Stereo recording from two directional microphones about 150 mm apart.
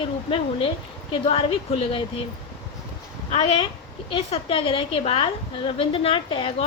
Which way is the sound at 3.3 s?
40° left (ahead or behind).